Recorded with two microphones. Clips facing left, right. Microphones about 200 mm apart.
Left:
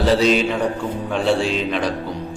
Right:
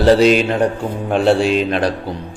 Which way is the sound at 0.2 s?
65° right (ahead or behind).